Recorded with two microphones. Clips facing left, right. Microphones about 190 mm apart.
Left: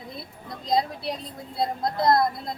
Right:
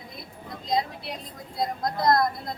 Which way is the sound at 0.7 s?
35° left (ahead or behind).